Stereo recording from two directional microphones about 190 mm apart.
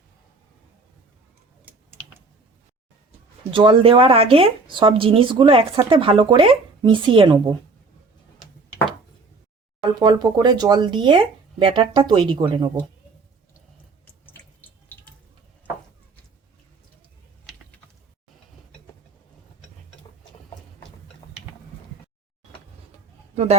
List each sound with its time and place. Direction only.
3.5 s speech: 25° right (ahead or behind)
10.0 s speech: 20° right (ahead or behind)
23.3 s a sound: 35° right (ahead or behind)